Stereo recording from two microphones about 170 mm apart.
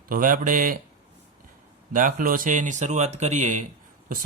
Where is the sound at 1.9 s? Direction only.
50° right (ahead or behind).